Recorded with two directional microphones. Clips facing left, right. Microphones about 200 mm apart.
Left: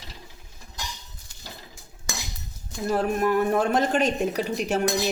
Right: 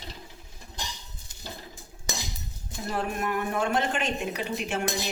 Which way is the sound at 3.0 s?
40° left (ahead or behind).